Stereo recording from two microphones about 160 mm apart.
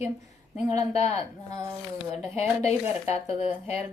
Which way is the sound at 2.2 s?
45° left (ahead or behind).